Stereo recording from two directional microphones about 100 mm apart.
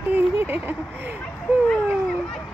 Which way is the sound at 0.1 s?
20° right (ahead or behind).